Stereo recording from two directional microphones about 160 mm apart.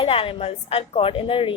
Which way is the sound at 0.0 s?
35° left (ahead or behind).